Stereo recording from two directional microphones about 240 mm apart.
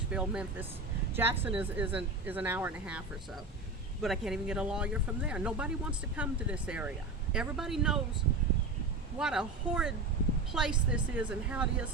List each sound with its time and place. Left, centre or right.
0.1 s speech: centre
4.0 s speech: centre
9.1 s speech: centre